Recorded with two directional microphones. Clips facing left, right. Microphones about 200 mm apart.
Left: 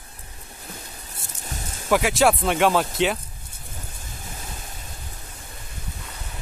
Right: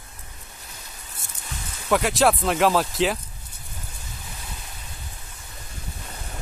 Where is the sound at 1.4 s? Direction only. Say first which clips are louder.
Left 3 dB; 40° left (ahead or behind).